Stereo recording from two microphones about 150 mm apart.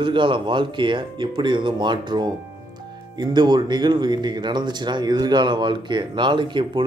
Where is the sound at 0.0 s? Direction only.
35° right (ahead or behind).